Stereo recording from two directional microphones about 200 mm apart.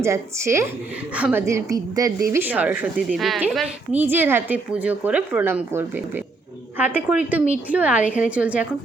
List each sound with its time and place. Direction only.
0.0 s a woman's voice: 15° right (ahead or behind)